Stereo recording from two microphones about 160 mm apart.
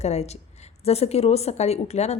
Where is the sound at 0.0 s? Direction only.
45° left (ahead or behind).